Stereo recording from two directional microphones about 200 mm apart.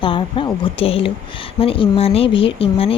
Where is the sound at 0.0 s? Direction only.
25° left (ahead or behind).